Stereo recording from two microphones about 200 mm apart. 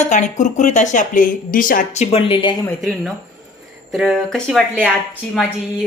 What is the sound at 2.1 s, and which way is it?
Speech, 25° left (ahead or behind).